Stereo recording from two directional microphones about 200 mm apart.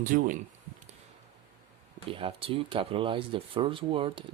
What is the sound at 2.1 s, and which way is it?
Speech, 25° right (ahead or behind).